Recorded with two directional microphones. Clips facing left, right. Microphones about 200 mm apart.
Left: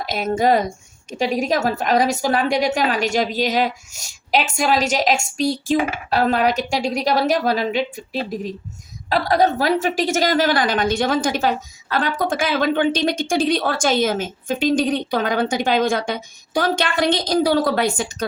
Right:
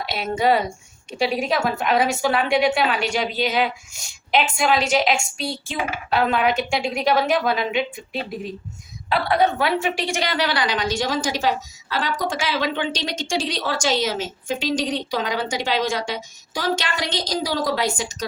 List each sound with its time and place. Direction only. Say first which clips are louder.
0.0 s a woman's voice: left 3 dB; 40° left (ahead or behind); by 18.3 s 55° left (ahead or behind)